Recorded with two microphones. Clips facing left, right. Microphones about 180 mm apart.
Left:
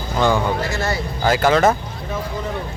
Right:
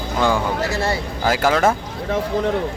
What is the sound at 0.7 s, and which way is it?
Speech, 30° right (ahead or behind).